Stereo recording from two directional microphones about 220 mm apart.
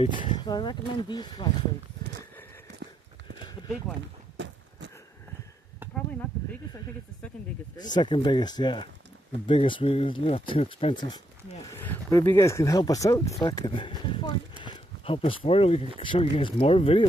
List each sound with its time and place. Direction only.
0.0 s speech: 25° left (ahead or behind)
3.3 s clip-clop: 15° left (ahead or behind)
4.4 s a sound: 55° right (ahead or behind)
7.7 s speech: 20° left (ahead or behind)